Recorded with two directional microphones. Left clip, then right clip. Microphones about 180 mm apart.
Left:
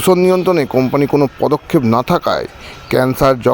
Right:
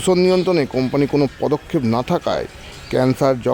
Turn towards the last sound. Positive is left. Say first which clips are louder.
# left 4 dB
turn(degrees=10)  # may be behind; listen again after turning